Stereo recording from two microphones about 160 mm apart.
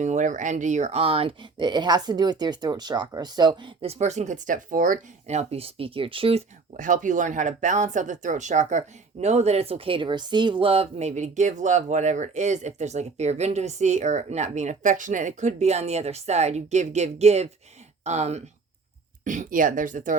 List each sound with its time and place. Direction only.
0.0 s speech: 50° right (ahead or behind)
6.7 s speech: 55° right (ahead or behind)